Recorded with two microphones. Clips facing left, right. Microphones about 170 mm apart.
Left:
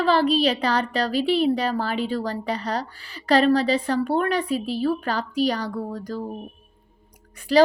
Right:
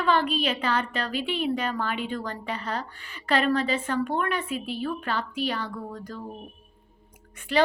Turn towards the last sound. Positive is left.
turn(degrees=35)  # may be behind; listen again after turning